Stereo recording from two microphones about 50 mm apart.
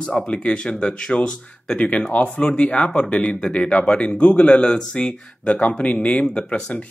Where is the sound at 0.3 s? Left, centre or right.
Left.